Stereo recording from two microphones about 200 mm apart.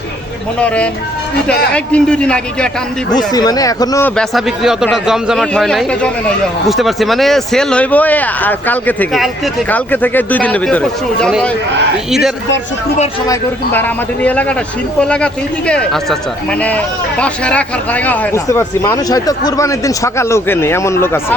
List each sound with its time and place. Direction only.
1.7 s a man's voice: 5° left (ahead or behind)
3.2 s speech: 20° left (ahead or behind)
4.2 s a man's voice: centre (ahead or behind)
13.2 s speech: 15° left (ahead or behind)